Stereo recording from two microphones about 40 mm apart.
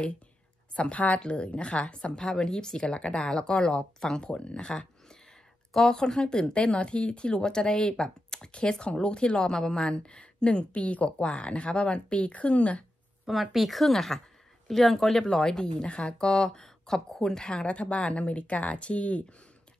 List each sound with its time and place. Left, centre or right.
0.7 s a woman's voice: left
10.7 s speech: left
13.2 s speech: centre; by 19.2 s left